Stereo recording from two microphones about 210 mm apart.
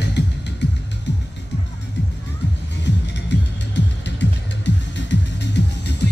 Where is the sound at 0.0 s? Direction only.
55° left (ahead or behind).